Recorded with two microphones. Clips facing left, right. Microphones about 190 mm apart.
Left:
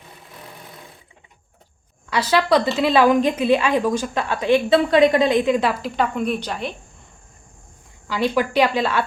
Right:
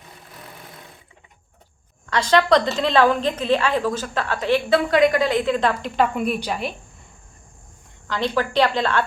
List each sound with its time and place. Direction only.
2.0 s a woman's voice: 10° left (ahead or behind)
8.0 s a woman's voice: 10° left (ahead or behind)